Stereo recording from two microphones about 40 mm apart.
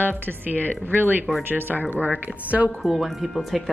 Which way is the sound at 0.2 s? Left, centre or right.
Right.